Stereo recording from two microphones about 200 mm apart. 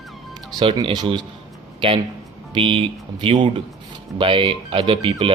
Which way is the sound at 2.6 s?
25° right (ahead or behind).